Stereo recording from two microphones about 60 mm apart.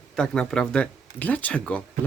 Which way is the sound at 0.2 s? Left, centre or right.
Centre.